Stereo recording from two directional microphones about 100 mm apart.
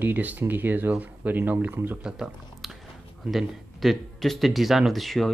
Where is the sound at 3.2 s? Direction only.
Centre (ahead or behind).